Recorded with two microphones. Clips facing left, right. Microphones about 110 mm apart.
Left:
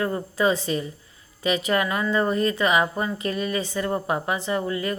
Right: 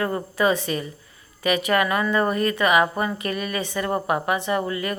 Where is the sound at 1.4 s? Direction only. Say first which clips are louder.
Right 2 dB; 70° right (ahead or behind).